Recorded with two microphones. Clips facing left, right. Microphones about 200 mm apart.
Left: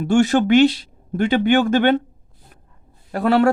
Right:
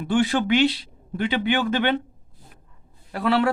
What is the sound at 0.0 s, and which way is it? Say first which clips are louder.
Speech: left 5 dB; 45° left (ahead or behind).